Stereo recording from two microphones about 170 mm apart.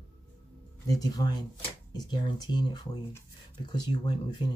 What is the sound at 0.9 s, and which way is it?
Speech, 20° left (ahead or behind).